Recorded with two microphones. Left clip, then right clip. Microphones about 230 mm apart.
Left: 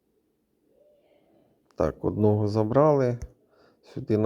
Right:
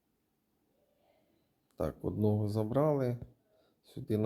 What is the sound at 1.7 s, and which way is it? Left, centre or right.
Speech, left.